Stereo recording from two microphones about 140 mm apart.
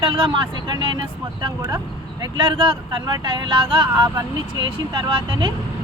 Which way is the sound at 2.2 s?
35° right (ahead or behind).